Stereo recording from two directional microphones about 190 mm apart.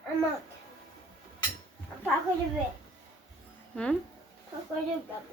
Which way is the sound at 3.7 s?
5° left (ahead or behind).